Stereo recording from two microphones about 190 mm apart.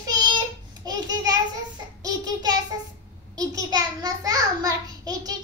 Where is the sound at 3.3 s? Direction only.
20° right (ahead or behind).